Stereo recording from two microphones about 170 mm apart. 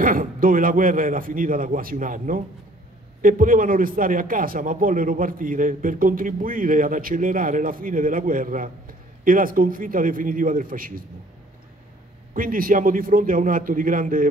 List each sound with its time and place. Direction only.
0.0 s a man's voice: 55° right (ahead or behind)
12.4 s a man's voice: 55° right (ahead or behind)